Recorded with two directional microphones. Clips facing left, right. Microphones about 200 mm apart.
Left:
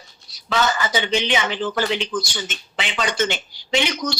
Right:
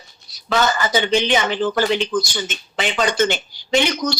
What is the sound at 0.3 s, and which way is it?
Speech, 40° right (ahead or behind).